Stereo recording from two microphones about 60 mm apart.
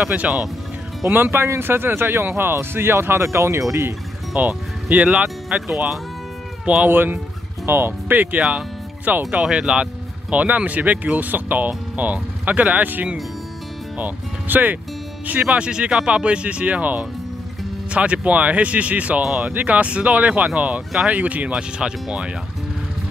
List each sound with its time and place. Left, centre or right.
0.0 s speech: right
1.0 s speech: right
4.4 s speech: right
6.6 s speech: right
6.9 s speech: right
8.5 s music: right
9.3 s speech: centre
15.4 s speech: centre